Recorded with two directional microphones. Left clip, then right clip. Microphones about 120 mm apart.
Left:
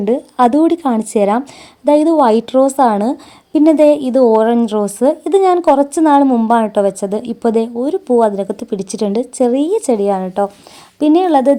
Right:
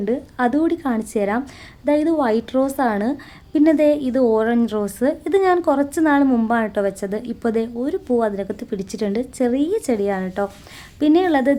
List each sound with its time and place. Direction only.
0.0 s a woman's voice: 45° left (ahead or behind); by 11.5 s 25° left (ahead or behind)